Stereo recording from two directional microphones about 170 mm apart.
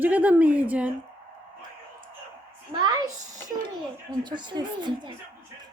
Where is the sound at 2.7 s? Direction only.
25° right (ahead or behind).